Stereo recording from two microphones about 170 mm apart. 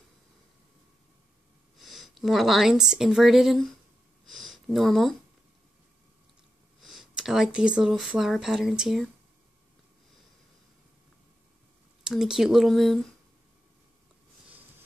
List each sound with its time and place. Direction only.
1.8 s a woman's voice: centre (ahead or behind)
4.3 s a sound: centre (ahead or behind)
6.8 s speech: centre (ahead or behind)
12.0 s speech: 5° right (ahead or behind)